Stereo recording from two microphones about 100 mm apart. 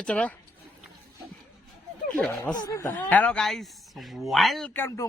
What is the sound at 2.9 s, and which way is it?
Speech, 15° left (ahead or behind).